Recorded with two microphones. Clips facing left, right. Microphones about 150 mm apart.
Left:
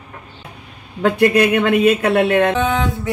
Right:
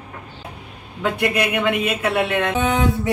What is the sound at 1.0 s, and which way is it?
Speech, 45° left (ahead or behind).